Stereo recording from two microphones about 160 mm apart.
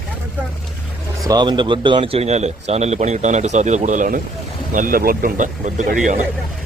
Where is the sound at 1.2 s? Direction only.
25° right (ahead or behind); by 5.9 s 50° right (ahead or behind).